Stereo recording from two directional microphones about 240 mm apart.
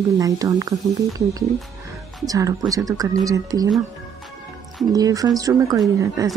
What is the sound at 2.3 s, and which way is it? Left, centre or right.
Speech, centre.